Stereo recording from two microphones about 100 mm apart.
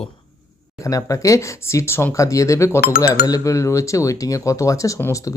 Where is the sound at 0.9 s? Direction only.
35° left (ahead or behind).